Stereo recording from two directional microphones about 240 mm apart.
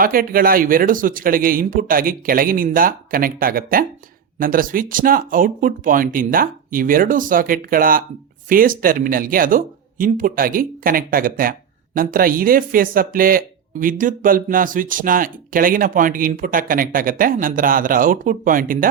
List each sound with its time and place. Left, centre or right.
0.0 s speech: right